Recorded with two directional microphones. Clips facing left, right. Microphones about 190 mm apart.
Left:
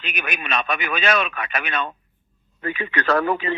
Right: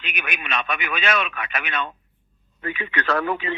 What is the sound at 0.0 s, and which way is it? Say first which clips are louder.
A man's voice: left 3 dB; 40° left (ahead or behind).